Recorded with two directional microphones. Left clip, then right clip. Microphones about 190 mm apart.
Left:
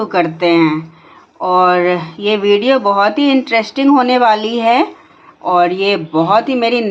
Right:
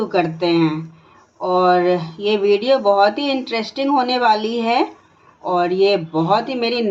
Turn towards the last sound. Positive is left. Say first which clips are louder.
# left 6 dB
turn(degrees=30)  # may be behind; listen again after turning